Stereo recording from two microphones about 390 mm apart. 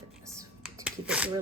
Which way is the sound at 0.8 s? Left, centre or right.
Centre.